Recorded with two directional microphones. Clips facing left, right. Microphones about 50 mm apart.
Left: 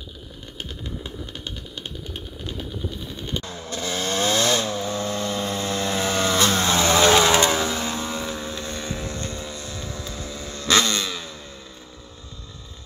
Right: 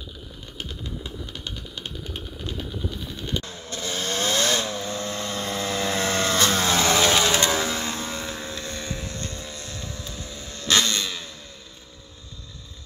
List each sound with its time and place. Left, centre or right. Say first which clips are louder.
3.6 s chainsaw: left 2 dB; left
5.4 s vehicle: left 2 dB; centre
5.7 s vehicle: left 1 dB; centre
5.9 s chainsaw: left 2 dB; centre
6.7 s vehicle: left 1 dB; centre
7.2 s vehicle: left 3 dB; centre
8.9 s vehicle: left 3 dB; centre
9.8 s vehicle: left 3 dB; left
10.9 s a sound: left 2 dB; left